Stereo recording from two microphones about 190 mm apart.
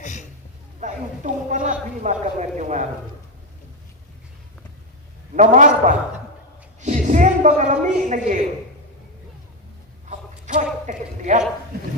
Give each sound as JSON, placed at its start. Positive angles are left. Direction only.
{"t": 0.0, "sound": "a sound", "side_deg": 40}
{"t": 0.8, "sound": "a woman's voice", "side_deg": -40}
{"t": 5.4, "sound": "a man's voice", "side_deg": -40}
{"t": 10.1, "sound": "a man's voice", "side_deg": -40}